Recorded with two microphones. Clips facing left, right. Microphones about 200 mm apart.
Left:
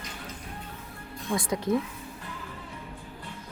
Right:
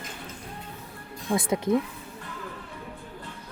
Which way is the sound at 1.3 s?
25° right (ahead or behind).